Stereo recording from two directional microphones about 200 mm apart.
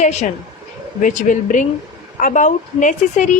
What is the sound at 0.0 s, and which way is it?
A woman's voice, 35° left (ahead or behind).